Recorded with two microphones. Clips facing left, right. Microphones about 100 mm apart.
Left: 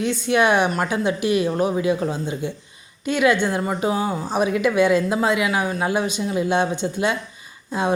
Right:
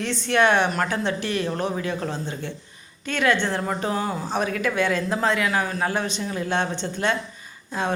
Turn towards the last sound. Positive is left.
turn(degrees=15)  # may be behind; listen again after turning